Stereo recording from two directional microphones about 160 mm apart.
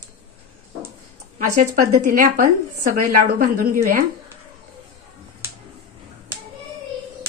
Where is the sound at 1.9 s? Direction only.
55° right (ahead or behind).